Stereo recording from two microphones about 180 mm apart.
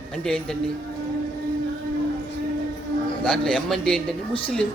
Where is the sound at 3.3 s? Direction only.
5° left (ahead or behind).